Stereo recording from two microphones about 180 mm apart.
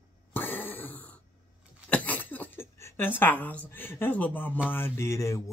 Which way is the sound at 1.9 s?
10° left (ahead or behind).